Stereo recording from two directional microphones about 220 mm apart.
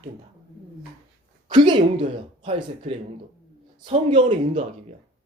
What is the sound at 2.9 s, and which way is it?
Speech, 25° right (ahead or behind).